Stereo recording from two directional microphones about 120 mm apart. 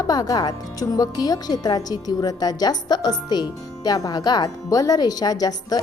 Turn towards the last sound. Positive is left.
turn(degrees=30)  # may be behind; listen again after turning